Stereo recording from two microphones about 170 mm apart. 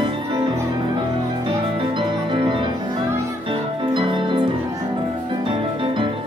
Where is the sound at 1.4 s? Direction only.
30° right (ahead or behind).